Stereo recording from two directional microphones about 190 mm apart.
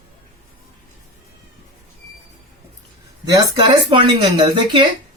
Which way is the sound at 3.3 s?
20° right (ahead or behind).